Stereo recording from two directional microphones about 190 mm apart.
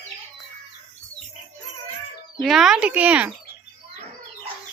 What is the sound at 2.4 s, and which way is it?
Speech, centre (ahead or behind).